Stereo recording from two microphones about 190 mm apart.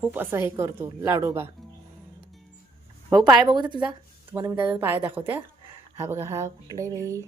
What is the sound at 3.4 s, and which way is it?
A woman's voice, 25° right (ahead or behind).